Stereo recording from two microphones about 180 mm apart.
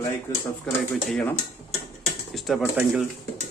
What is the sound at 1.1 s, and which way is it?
Speech, 5° left (ahead or behind).